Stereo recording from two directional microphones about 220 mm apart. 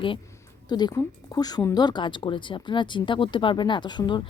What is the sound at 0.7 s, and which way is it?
Speech, 20° left (ahead or behind).